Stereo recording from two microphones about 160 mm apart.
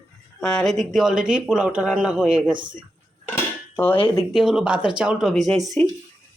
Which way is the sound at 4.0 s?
30° left (ahead or behind).